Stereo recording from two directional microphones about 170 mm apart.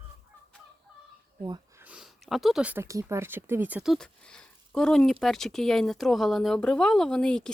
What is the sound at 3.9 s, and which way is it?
Speech, 5° left (ahead or behind).